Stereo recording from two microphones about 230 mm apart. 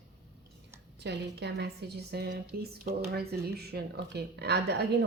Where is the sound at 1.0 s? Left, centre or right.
Right.